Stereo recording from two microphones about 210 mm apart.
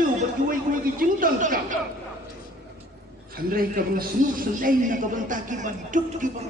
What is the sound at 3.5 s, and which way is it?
Speech, 45° right (ahead or behind).